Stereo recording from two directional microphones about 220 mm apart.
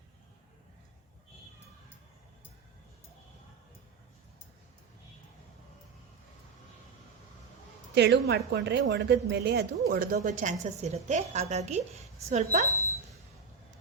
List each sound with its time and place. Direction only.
7.9 s a woman's voice: 50° right (ahead or behind); by 12.6 s 30° right (ahead or behind)